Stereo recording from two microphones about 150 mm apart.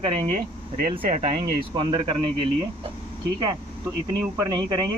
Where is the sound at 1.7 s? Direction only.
35° right (ahead or behind).